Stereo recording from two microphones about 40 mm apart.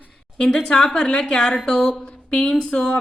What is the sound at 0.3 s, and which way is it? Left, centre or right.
A woman's voice, left.